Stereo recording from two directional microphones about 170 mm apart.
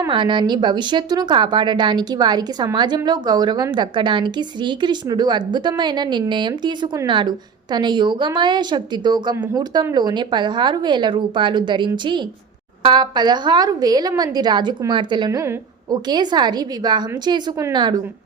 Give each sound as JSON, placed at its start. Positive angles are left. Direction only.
{"t": 0.1, "sound": "speech", "side_deg": -30}